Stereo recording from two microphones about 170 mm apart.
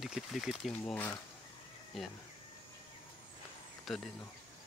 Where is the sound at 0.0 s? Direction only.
Centre (ahead or behind).